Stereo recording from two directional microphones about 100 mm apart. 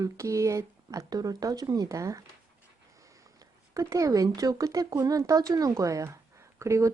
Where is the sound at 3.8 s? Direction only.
35° right (ahead or behind).